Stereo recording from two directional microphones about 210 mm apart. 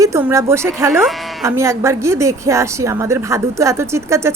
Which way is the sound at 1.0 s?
Centre (ahead or behind).